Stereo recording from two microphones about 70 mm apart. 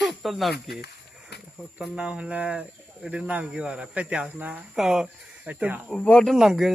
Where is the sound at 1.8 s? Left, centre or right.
Centre.